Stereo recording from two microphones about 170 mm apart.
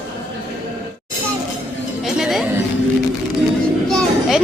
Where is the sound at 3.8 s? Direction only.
Centre (ahead or behind).